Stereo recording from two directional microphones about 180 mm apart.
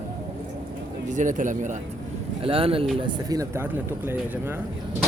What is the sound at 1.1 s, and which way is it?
Speech, 45° right (ahead or behind).